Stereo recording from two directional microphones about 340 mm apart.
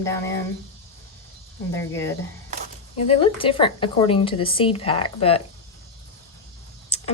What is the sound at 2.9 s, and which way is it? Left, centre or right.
A woman's voice, centre.